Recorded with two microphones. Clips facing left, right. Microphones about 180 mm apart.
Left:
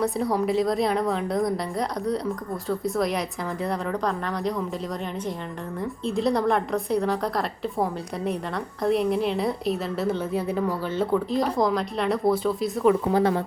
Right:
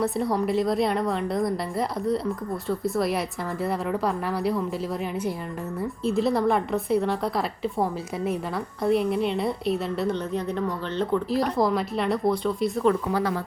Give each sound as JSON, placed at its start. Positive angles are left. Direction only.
{"t": 0.0, "sound": "a woman's voice", "side_deg": 0}
{"t": 2.6, "sound": "a woman's voice", "side_deg": 0}
{"t": 6.1, "sound": "a woman's voice", "side_deg": 0}
{"t": 13.1, "sound": "speech", "side_deg": 25}